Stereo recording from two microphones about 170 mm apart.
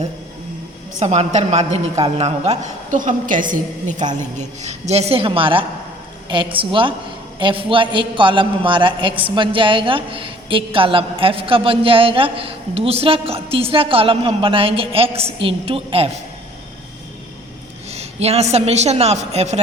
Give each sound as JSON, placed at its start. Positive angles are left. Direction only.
{"t": 0.9, "sound": "a woman's voice", "side_deg": -40}
{"t": 17.8, "sound": "a woman's voice", "side_deg": -40}